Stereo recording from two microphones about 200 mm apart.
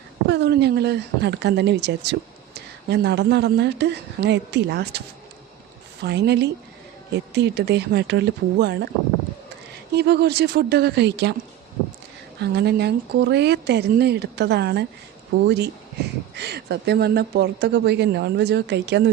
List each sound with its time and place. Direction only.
0.3 s a woman's voice: 60° right (ahead or behind)
6.1 s a woman's voice: 60° right (ahead or behind)
9.9 s a woman's voice: 55° right (ahead or behind)
12.4 s a woman's voice: 55° right (ahead or behind)